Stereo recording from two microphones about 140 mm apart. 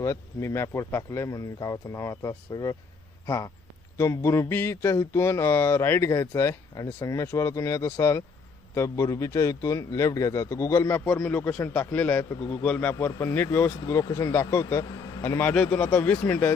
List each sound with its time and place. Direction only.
0.0 s a man's voice: 25° left (ahead or behind)